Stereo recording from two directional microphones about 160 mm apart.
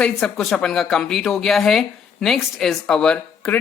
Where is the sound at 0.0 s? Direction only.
5° left (ahead or behind).